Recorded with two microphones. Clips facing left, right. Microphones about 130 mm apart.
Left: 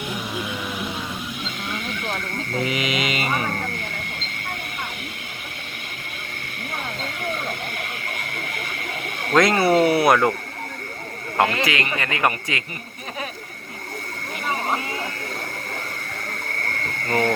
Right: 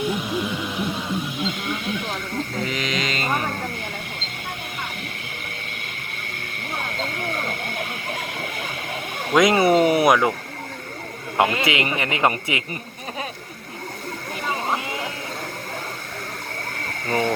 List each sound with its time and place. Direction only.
2.6 s a sound: 10° left (ahead or behind)
9.3 s speech: 10° right (ahead or behind)
11.3 s speech: 20° right (ahead or behind)
17.1 s speech: 10° right (ahead or behind)